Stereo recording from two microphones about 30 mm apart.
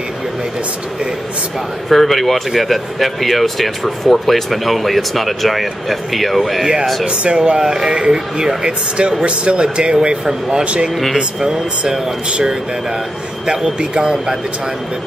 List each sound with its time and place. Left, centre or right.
1.9 s speech: centre
6.6 s speech: right
7.1 s a man's voice: right